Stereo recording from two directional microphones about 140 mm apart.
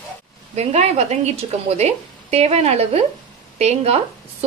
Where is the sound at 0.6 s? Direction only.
50° right (ahead or behind).